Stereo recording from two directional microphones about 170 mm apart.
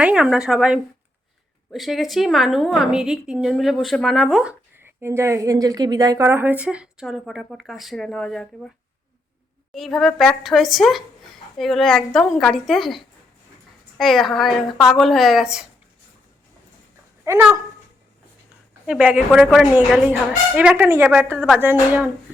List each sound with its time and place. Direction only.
0.0 s a woman's voice: 5° right (ahead or behind)
4.9 s a woman's voice: 15° right (ahead or behind); by 8.7 s centre (ahead or behind)
9.7 s a woman's voice: centre (ahead or behind)
17.3 s a woman's voice: 15° right (ahead or behind)
18.9 s a woman's voice: 5° right (ahead or behind)